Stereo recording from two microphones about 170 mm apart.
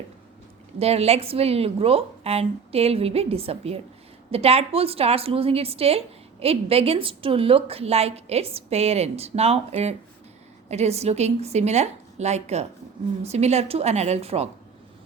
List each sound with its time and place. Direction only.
0.8 s a woman's voice: 35° right (ahead or behind)